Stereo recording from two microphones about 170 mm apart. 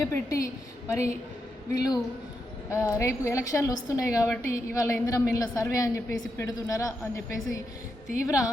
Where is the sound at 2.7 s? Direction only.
15° left (ahead or behind).